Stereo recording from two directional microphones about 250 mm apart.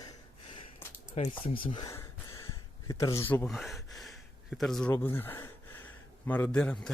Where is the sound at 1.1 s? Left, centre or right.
Left.